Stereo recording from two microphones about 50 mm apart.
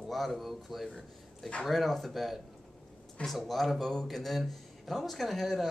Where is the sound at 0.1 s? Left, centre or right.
Centre.